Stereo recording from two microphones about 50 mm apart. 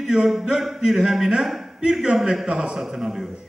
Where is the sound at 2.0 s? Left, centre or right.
Centre.